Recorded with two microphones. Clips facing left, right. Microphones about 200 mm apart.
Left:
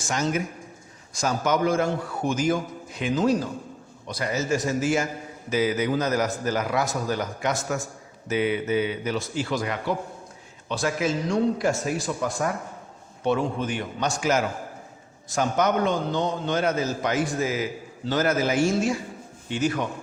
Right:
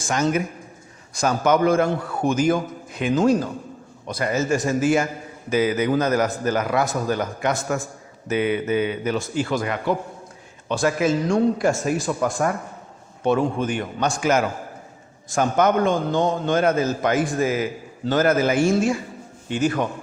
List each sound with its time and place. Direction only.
0.1 s a man's voice: 60° right (ahead or behind)